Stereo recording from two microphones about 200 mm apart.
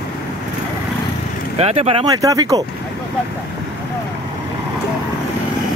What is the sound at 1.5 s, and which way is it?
Speech, 30° right (ahead or behind).